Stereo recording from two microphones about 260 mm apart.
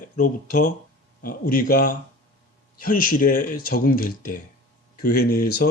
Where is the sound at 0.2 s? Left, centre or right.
Left.